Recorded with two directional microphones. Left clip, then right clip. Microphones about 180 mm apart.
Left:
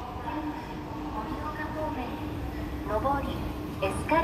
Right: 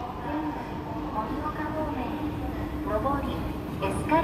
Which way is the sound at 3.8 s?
35° left (ahead or behind).